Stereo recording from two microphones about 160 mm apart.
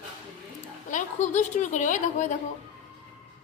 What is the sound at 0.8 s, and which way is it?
A woman's voice, 50° left (ahead or behind).